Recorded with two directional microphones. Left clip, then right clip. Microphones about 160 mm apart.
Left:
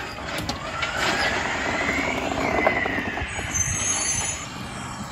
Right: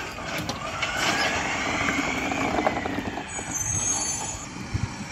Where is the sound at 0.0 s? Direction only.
15° right (ahead or behind).